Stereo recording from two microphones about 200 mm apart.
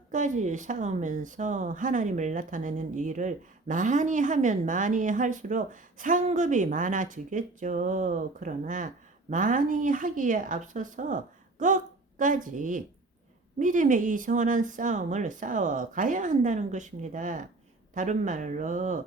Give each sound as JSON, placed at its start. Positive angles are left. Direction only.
{"t": 0.1, "sound": "speech", "side_deg": -40}